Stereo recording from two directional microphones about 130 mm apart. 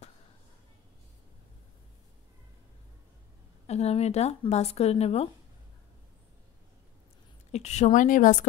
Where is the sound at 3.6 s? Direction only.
55° left (ahead or behind).